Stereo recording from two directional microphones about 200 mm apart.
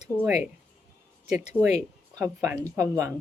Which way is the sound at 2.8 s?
15° right (ahead or behind).